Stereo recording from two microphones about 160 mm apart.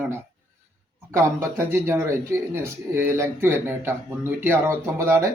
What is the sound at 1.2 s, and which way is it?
Speech, 15° right (ahead or behind).